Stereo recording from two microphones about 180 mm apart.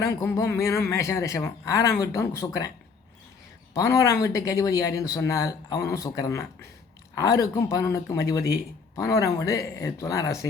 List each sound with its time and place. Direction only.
0.1 s speech: 15° left (ahead or behind)
3.8 s speech: 15° left (ahead or behind)